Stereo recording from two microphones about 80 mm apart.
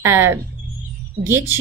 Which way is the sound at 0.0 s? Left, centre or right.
Right.